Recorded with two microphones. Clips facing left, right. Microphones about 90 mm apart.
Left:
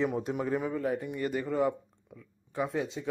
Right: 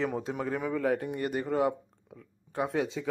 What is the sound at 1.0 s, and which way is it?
Speech, 45° right (ahead or behind).